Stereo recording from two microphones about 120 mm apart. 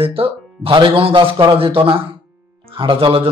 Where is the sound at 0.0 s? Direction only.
50° right (ahead or behind).